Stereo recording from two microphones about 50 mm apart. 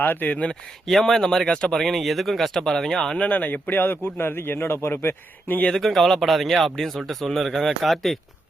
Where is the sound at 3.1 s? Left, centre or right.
Left.